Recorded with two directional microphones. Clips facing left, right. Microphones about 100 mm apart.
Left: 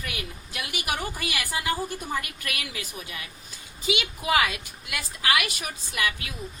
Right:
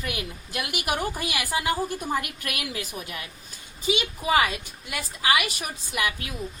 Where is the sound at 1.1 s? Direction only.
15° right (ahead or behind).